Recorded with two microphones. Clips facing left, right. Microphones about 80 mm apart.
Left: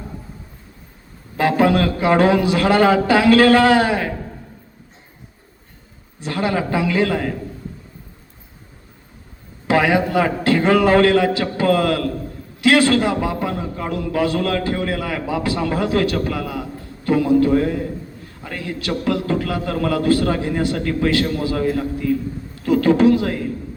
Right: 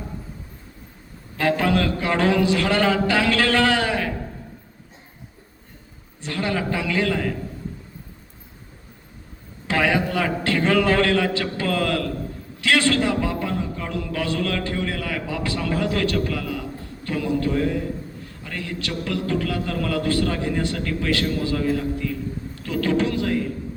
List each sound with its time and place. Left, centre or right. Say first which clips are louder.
1.4 s speech: left 5 dB; left
6.2 s speech: left 4 dB; left
9.6 s a man's voice: left 5 dB; left